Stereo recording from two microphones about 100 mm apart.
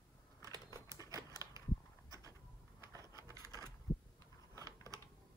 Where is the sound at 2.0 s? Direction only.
35° right (ahead or behind).